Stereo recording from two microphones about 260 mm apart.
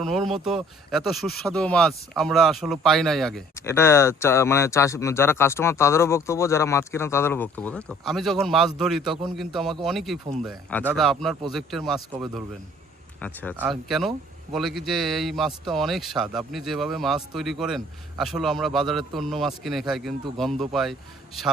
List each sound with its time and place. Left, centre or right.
0.0 s speech: centre